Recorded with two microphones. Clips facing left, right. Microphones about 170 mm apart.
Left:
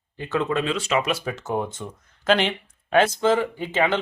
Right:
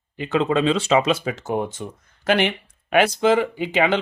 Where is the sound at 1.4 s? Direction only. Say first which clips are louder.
Right 2 dB; 15° right (ahead or behind).